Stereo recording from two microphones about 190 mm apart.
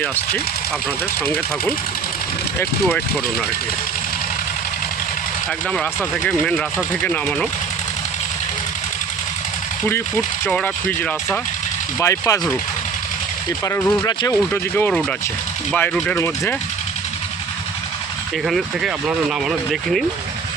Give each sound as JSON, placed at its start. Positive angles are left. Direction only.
{"t": 5.7, "sound": "speech", "side_deg": 5}
{"t": 10.4, "sound": "speech", "side_deg": 5}
{"t": 13.7, "sound": "speech", "side_deg": 10}
{"t": 18.4, "sound": "speech", "side_deg": 0}